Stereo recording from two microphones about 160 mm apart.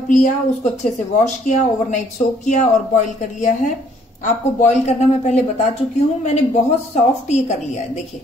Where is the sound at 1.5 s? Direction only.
50° left (ahead or behind).